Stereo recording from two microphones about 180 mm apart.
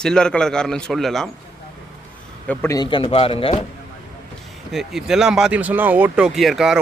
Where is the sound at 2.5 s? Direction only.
15° left (ahead or behind); by 3.6 s 30° left (ahead or behind).